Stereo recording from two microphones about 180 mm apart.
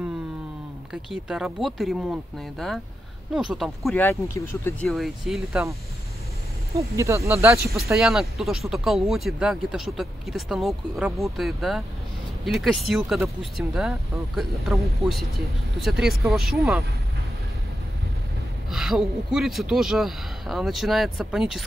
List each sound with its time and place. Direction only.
1.3 s speech: centre (ahead or behind)
4.0 s speech: 15° left (ahead or behind)
4.8 s speech: centre (ahead or behind)
7.0 s speech: 15° right (ahead or behind)
7.9 s speech: centre (ahead or behind)
18.7 s speech: centre (ahead or behind)